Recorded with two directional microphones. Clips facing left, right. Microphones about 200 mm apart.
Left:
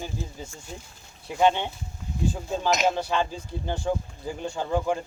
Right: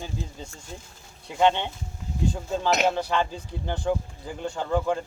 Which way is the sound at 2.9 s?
10° left (ahead or behind).